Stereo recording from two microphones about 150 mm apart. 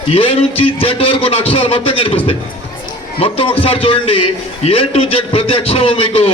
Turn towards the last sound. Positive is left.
turn(degrees=40)  # may be behind; listen again after turning